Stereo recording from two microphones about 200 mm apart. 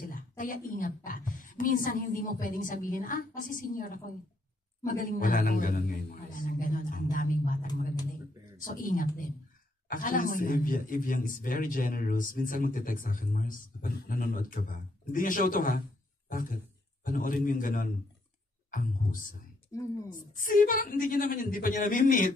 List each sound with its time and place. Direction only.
0.0 s a woman's voice: 40° left (ahead or behind)